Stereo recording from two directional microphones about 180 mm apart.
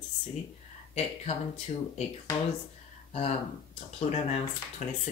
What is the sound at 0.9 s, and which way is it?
Speech, 35° left (ahead or behind).